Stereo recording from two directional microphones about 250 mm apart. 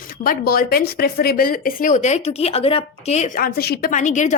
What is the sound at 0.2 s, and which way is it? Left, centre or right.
A woman's voice, left.